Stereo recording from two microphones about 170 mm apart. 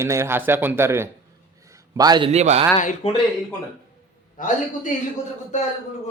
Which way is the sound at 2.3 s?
40° right (ahead or behind).